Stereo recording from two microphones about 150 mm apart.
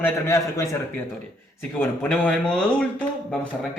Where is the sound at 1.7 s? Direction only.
10° left (ahead or behind).